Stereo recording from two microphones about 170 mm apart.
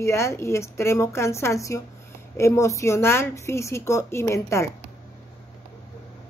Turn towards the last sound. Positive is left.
turn(degrees=15)  # may be behind; listen again after turning